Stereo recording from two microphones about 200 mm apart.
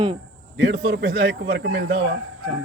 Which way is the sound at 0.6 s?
55° right (ahead or behind).